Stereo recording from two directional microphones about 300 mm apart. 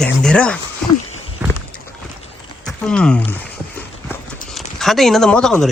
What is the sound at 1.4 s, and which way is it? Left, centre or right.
Rowboat, centre.